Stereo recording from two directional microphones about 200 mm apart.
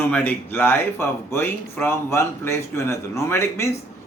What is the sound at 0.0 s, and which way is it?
Speech, 10° left (ahead or behind).